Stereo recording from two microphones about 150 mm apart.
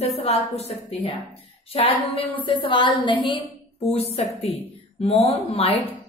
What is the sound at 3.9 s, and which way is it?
A woman's voice, 45° left (ahead or behind).